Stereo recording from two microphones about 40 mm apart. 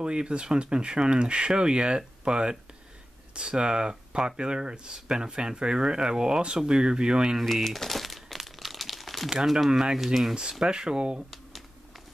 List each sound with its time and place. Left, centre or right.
0.0 s speech: right
7.6 s crumpling: centre
9.3 s speech: centre
9.9 s speech: centre
10.6 s speech: centre